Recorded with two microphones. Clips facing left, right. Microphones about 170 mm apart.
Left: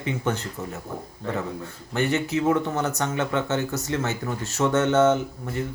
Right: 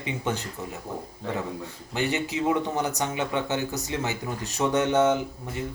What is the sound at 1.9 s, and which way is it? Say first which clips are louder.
Speech: left 3 dB; 15° right (ahead or behind).